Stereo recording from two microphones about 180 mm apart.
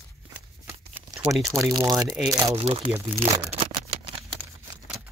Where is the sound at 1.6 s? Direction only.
20° right (ahead or behind).